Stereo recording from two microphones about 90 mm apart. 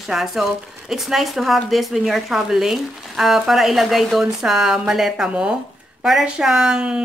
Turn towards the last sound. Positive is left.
turn(degrees=-10)  # may be behind; listen again after turning